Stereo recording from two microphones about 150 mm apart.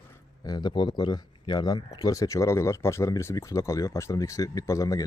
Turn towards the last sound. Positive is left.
turn(degrees=20)  # may be behind; listen again after turning